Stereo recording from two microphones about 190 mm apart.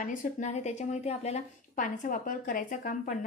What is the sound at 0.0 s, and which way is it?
A woman's voice, 40° left (ahead or behind).